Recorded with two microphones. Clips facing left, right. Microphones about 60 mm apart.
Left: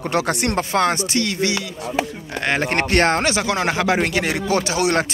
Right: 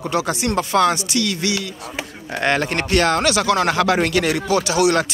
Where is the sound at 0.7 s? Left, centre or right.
Left.